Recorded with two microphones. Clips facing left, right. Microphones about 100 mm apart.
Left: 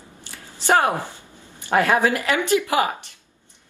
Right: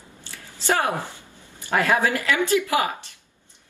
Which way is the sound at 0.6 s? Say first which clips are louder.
Left 4 dB; 20° left (ahead or behind).